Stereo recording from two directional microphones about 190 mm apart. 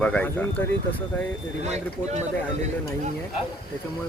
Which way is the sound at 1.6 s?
35° right (ahead or behind).